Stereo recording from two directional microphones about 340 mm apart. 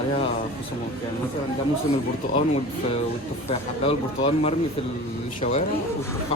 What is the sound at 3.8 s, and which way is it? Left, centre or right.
Speech, centre.